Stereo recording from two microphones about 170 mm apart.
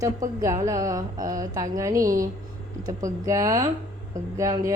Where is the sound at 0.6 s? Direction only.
20° right (ahead or behind).